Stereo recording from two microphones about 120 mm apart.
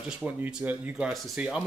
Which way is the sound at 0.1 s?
10° right (ahead or behind).